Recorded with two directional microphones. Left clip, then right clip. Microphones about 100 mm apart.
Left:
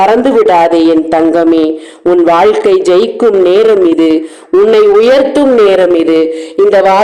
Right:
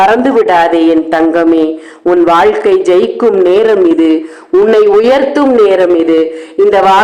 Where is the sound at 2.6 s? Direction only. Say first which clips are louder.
Left 1 dB; 30° left (ahead or behind).